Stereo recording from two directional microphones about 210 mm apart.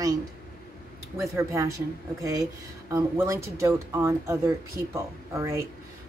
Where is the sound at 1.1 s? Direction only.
15° right (ahead or behind).